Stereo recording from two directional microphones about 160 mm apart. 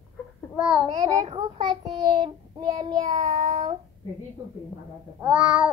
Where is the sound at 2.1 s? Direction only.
30° right (ahead or behind).